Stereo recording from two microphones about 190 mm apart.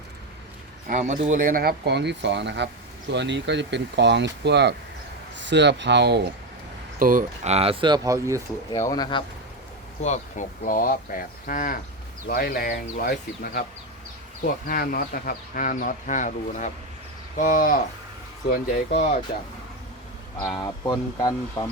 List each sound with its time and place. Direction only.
0.9 s speech: 40° right (ahead or behind); by 6.2 s 65° right (ahead or behind)
7.0 s speech: 45° right (ahead or behind); by 8.4 s 15° right (ahead or behind)
8.7 s speech: 20° left (ahead or behind)
10.0 s speech: 40° left (ahead or behind)
20.5 s speech: 20° left (ahead or behind)